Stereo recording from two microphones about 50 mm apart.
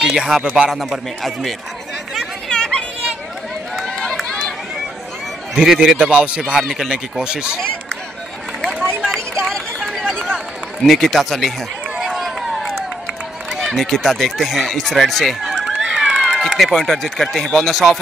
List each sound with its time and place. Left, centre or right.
0.0 s speech: centre
0.7 s speech: centre
2.5 s a sound: centre
3.8 s run: centre
5.5 s a man's voice: centre
6.0 s speech: right
6.7 s speech: centre
8.5 s a sound: centre
9.4 s a sound: centre
10.1 s run: centre
13.5 s speech: centre
15.4 s run: centre
16.6 s speech: centre